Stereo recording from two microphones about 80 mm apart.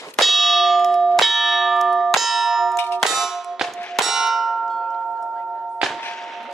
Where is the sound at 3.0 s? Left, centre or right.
Centre.